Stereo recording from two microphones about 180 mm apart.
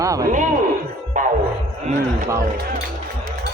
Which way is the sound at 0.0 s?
20° right (ahead or behind).